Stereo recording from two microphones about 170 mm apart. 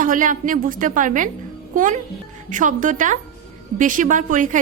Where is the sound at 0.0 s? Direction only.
50° right (ahead or behind).